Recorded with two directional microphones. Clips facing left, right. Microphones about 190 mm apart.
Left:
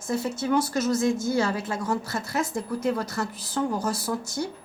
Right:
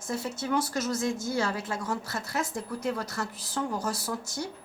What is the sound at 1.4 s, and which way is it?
A woman's voice, 20° left (ahead or behind).